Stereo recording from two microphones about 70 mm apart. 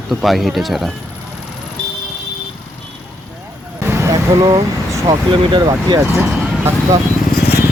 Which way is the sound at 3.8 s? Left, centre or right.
Right.